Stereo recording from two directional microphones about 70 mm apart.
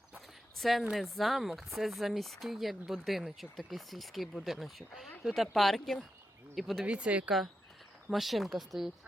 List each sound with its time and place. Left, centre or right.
0.5 s speech: centre
6.8 s speech: centre
7.3 s speech: centre